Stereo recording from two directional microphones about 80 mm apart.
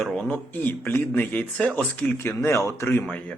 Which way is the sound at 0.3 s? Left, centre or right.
Left.